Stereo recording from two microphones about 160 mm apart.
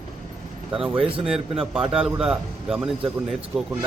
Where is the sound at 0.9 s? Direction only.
35° right (ahead or behind).